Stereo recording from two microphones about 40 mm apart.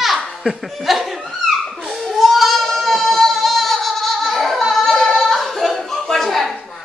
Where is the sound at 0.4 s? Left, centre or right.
Centre.